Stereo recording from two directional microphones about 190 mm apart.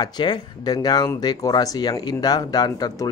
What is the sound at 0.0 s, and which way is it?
Speech, 25° left (ahead or behind).